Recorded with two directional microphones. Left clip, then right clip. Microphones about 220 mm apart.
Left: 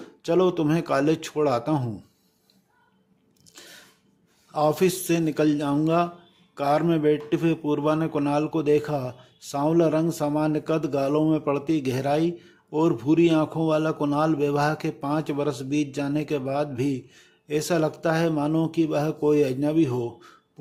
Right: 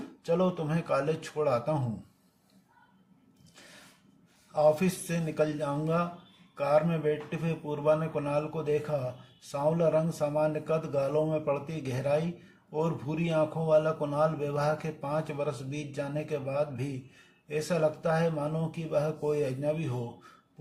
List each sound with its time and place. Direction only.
0.2 s speech: 45° left (ahead or behind)
4.5 s speech: 45° left (ahead or behind)